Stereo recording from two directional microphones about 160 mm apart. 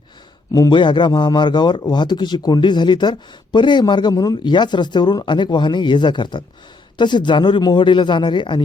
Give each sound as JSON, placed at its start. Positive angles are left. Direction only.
{"t": 0.5, "sound": "a man's voice", "side_deg": 25}